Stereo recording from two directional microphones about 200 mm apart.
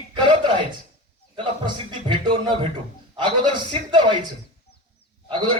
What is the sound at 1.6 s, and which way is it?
A man's voice, 20° right (ahead or behind).